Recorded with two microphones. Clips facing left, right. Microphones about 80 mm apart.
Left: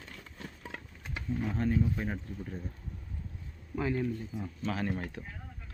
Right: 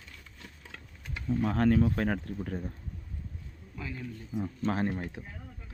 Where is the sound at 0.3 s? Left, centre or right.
Left.